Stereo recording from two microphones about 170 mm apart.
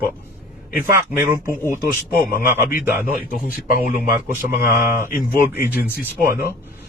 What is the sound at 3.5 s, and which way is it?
Speech, 55° left (ahead or behind).